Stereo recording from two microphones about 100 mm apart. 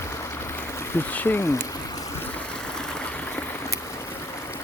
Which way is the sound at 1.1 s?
20° left (ahead or behind).